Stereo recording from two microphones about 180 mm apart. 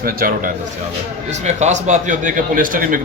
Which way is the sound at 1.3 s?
40° right (ahead or behind).